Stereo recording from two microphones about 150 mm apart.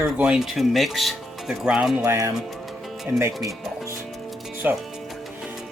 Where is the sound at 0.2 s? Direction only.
5° right (ahead or behind).